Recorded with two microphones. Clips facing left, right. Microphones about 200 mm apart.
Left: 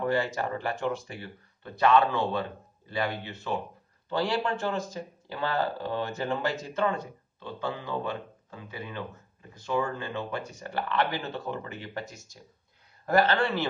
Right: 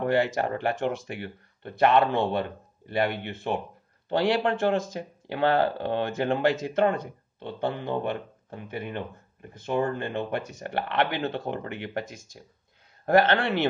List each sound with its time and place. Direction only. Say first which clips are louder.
0.0 s speech: right 4 dB; 60° right (ahead or behind)